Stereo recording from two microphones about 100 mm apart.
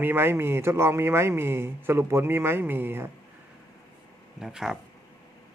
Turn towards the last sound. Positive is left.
turn(degrees=-5)  # may be behind; listen again after turning